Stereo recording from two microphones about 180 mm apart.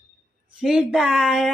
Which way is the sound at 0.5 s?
5° right (ahead or behind).